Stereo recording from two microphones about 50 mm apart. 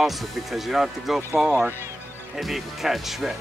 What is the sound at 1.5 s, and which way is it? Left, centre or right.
Speech, right.